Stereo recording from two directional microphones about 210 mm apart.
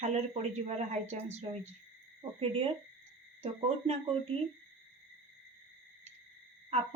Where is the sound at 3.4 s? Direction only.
30° right (ahead or behind).